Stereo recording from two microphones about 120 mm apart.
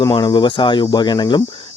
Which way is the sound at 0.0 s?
35° left (ahead or behind).